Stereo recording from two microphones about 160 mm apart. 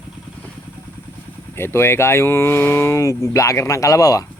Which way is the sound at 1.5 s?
15° left (ahead or behind).